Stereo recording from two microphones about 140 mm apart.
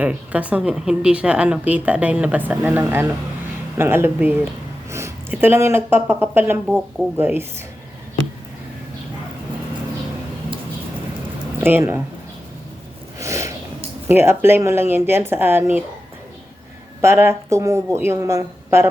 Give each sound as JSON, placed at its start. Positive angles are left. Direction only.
{"t": 0.0, "sound": "a woman's voice", "side_deg": -10}
{"t": 11.6, "sound": "a woman's voice", "side_deg": -15}
{"t": 13.1, "sound": "a sound", "side_deg": -20}
{"t": 14.1, "sound": "a woman's voice", "side_deg": -15}
{"t": 17.0, "sound": "a woman's voice", "side_deg": -15}